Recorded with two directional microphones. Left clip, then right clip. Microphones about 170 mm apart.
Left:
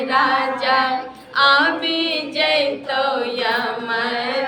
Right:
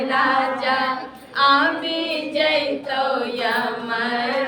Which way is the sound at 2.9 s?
15° left (ahead or behind).